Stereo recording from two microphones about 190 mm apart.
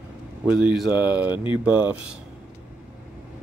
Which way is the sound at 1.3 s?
25° left (ahead or behind).